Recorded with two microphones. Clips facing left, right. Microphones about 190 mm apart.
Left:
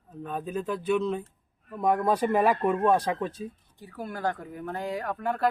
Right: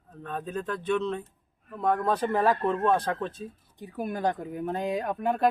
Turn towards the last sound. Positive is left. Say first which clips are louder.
# right 2 dB
turn(degrees=-20)  # may be behind; listen again after turning